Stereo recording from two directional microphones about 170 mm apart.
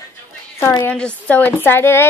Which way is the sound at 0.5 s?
15° left (ahead or behind).